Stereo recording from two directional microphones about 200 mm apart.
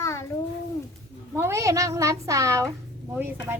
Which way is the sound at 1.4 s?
15° right (ahead or behind).